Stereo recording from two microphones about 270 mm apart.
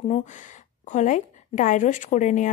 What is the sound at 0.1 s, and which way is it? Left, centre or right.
A woman's voice, left.